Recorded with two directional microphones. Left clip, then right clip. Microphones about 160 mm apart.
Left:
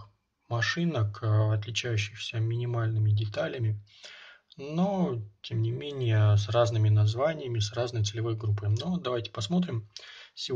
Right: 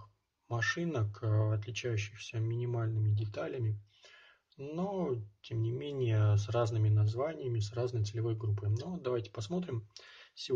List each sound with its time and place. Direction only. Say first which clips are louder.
0.5 s speech: left 4 dB; 20° right (ahead or behind)